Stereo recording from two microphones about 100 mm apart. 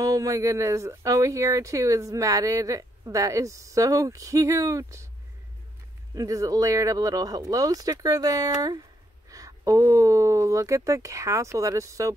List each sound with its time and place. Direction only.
0.0 s speech: 35° right (ahead or behind)
6.1 s speech: 35° right (ahead or behind)